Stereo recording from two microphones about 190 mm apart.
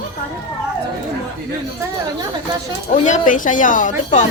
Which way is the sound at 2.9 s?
40° left (ahead or behind).